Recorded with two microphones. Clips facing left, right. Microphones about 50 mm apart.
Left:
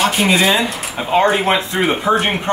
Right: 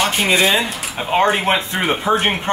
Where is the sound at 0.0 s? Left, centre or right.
Centre.